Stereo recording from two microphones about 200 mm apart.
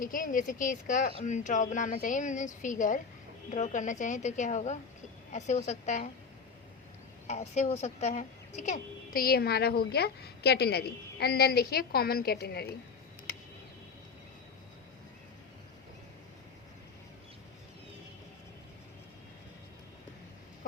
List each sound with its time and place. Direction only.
0.0 s speech: 45° left (ahead or behind)
7.3 s a woman's voice: 35° left (ahead or behind); by 12.6 s 50° left (ahead or behind)